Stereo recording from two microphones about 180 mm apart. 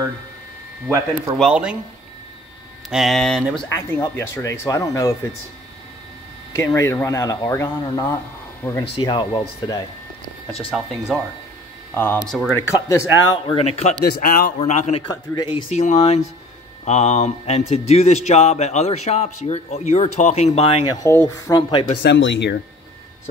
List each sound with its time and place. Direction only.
1.4 s speech: 5° right (ahead or behind)
2.9 s speech: centre (ahead or behind)
3.5 s speech: 15° left (ahead or behind)
6.5 s speech: 15° left (ahead or behind)
10.7 s speech: centre (ahead or behind)
11.9 s speech: 10° left (ahead or behind)
12.5 s speech: 15° left (ahead or behind)
13.5 s speech: 35° left (ahead or behind)
14.2 s a man's voice: 50° left (ahead or behind)
14.6 s speech: 35° left (ahead or behind)
15.0 s speech: 25° left (ahead or behind)
15.7 s speech: 40° left (ahead or behind)
21.0 s speech: 15° left (ahead or behind)
22.0 s speech: 90° left